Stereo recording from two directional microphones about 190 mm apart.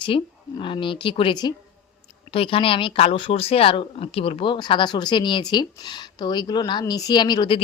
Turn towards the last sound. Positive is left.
turn(degrees=25)  # may be behind; listen again after turning